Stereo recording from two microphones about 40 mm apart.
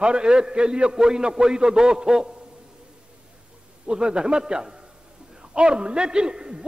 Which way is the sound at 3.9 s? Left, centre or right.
Right.